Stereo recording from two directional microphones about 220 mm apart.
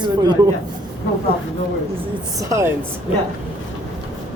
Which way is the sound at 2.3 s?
15° right (ahead or behind).